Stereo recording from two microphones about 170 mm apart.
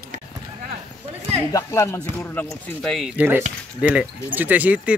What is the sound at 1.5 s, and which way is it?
Speech, 15° left (ahead or behind).